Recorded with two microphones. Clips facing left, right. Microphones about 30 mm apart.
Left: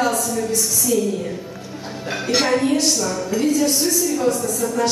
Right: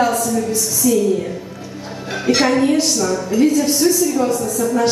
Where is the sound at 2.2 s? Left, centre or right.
Centre.